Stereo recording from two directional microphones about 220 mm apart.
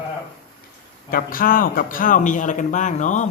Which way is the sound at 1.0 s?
40° left (ahead or behind).